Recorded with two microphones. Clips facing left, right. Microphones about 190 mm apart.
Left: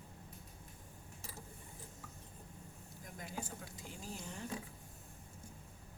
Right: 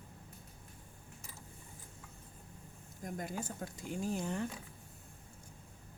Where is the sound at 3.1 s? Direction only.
50° right (ahead or behind).